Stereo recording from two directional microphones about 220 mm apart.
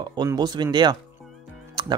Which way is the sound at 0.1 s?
20° right (ahead or behind).